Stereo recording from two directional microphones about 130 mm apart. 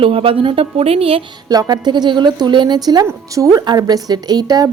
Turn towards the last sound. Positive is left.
turn(degrees=-30)  # may be behind; listen again after turning